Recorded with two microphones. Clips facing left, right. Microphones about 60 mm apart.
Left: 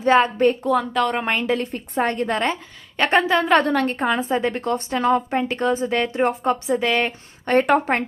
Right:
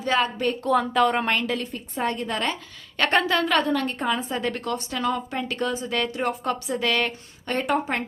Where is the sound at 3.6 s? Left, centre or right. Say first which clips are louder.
Left 4 dB; left.